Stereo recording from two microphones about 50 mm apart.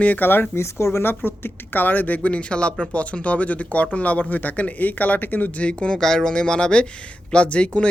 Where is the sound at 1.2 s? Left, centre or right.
Left.